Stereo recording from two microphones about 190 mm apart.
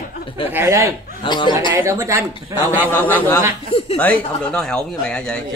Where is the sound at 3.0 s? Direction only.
10° left (ahead or behind).